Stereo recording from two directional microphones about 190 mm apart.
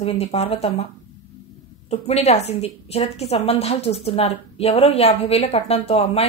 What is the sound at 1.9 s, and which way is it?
Speech, 35° left (ahead or behind).